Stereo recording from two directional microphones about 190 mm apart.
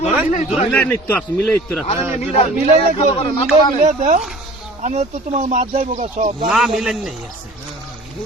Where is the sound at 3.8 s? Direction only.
40° right (ahead or behind).